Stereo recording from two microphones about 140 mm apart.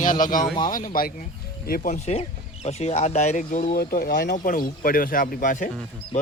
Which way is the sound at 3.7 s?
90° left.